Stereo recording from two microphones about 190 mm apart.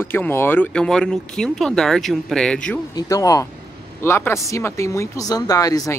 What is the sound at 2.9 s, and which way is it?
Speech, 20° left (ahead or behind).